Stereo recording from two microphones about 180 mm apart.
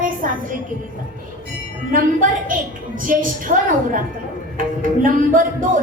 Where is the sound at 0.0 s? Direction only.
50° right (ahead or behind).